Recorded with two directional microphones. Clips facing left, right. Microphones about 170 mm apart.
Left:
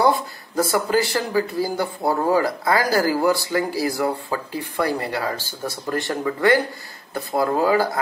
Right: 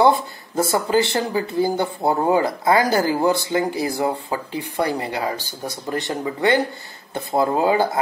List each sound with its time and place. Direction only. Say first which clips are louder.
0.6 s speech: right 1 dB; 25° right (ahead or behind)